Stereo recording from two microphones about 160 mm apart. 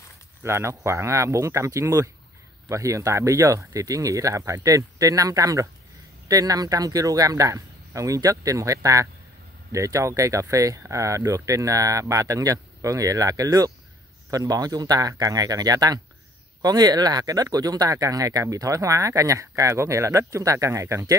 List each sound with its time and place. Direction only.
0.4 s speech: 15° right (ahead or behind)